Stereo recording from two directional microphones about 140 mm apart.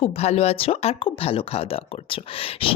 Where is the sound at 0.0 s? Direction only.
45° left (ahead or behind).